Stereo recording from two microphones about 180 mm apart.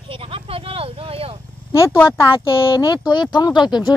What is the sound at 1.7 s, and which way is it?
Speech, 15° left (ahead or behind).